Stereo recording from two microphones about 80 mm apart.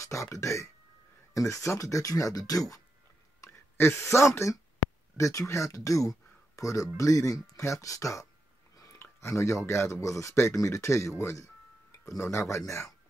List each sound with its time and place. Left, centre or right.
0.0 s speech: left
3.4 s speech: left
8.9 s speech: left